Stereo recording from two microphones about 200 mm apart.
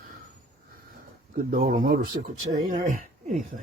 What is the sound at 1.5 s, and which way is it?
Speech, 45° right (ahead or behind).